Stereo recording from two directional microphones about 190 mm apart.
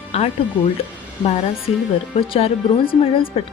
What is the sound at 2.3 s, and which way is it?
Speech, 30° left (ahead or behind).